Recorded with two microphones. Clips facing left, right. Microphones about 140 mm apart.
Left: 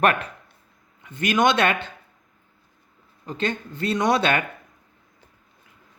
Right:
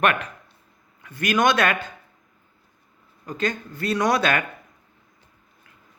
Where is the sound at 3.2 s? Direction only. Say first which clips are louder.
Even; 25° left (ahead or behind).